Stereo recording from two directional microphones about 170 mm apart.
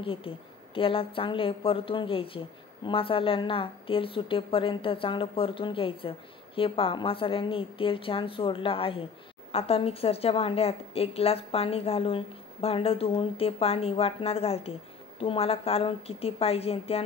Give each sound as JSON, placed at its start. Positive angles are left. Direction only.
{"t": 0.0, "sound": "a woman's voice", "side_deg": 30}